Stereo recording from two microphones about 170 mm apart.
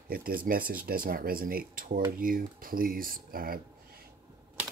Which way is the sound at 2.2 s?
55° right (ahead or behind).